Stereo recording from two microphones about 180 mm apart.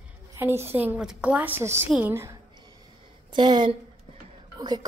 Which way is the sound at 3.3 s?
25° right (ahead or behind).